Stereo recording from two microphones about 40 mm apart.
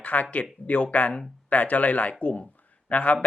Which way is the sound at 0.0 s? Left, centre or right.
Left.